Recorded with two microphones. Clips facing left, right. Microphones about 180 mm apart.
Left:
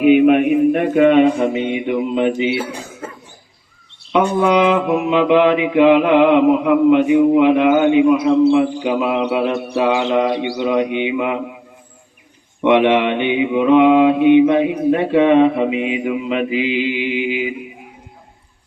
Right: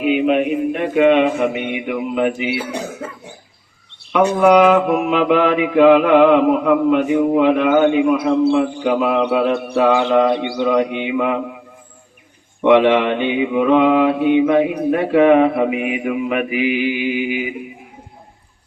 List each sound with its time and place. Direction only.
0.0 s mantra: 55° left (ahead or behind); by 2.6 s 25° left (ahead or behind)
4.9 s mantra: 20° left (ahead or behind)
8.4 s a man's voice: 15° left (ahead or behind)
12.6 s mantra: 20° left (ahead or behind)